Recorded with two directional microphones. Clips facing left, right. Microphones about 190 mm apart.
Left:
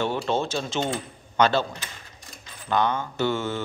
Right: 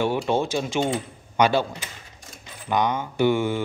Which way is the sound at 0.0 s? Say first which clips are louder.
Right 3 dB; 10° right (ahead or behind).